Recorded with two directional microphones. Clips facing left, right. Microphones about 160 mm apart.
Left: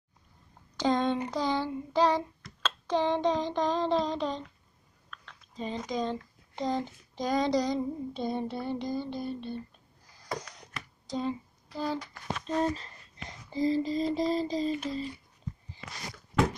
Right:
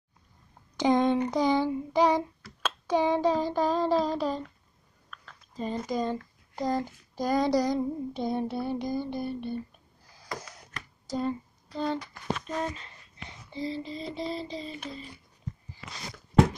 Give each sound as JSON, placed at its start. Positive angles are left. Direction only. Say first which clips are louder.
{"t": 0.7, "sound": "speech", "louder": "right 4 dB", "side_deg": -15}
{"t": 1.9, "sound": "child singing", "louder": "even", "side_deg": -15}
{"t": 5.1, "sound": "speech", "louder": "right 3 dB", "side_deg": -5}
{"t": 10.3, "sound": "a sound", "louder": "left 2 dB", "side_deg": -5}
{"t": 11.1, "sound": "speech", "louder": "right 2 dB", "side_deg": 0}
{"t": 12.4, "sound": "a sound", "louder": "left 4 dB", "side_deg": 35}